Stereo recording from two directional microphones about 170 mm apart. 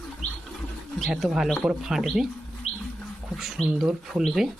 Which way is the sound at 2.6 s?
40° left (ahead or behind).